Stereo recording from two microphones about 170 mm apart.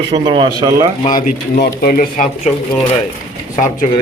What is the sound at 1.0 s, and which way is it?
Speech, 55° left (ahead or behind).